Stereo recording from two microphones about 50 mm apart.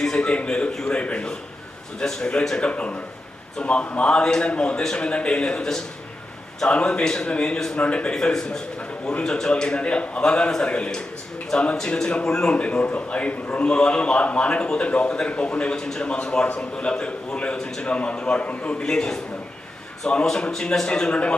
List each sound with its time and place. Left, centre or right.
0.2 s a man's voice: left
2.0 s a man's voice: centre
2.6 s a man's voice: left
6.7 s a man's voice: left
8.1 s a man's voice: centre
20.2 s a man's voice: centre